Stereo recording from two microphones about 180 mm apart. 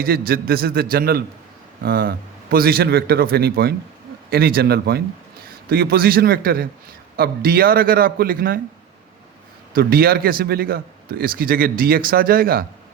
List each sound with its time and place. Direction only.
0.0 s a man's voice: 60° right (ahead or behind)
9.7 s a man's voice: 55° right (ahead or behind)